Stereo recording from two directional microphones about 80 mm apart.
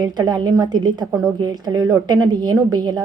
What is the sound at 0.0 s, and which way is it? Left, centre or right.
A woman's voice, right.